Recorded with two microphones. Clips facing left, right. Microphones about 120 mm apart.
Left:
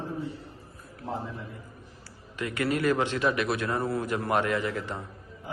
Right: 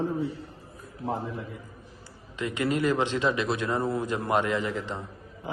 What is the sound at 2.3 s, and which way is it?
A man's voice, 20° right (ahead or behind).